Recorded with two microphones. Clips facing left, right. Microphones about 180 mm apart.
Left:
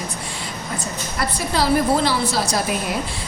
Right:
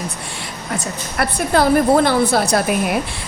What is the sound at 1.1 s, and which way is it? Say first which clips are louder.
A woman's voice: right 6 dB; 55° right (ahead or behind).